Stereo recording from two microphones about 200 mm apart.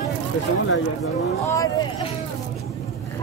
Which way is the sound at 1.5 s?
15° left (ahead or behind).